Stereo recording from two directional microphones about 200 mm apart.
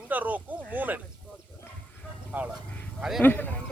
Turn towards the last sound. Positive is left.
turn(degrees=10)  # may be behind; listen again after turning